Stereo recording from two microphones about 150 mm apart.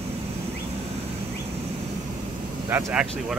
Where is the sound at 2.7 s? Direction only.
5° right (ahead or behind).